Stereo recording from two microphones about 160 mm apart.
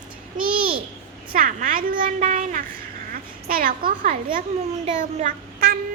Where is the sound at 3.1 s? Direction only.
65° right (ahead or behind).